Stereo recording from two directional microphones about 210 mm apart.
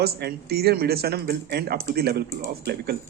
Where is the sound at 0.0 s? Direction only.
50° right (ahead or behind).